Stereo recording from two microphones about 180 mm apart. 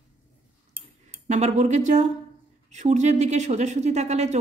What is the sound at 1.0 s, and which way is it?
Speech, 40° right (ahead or behind).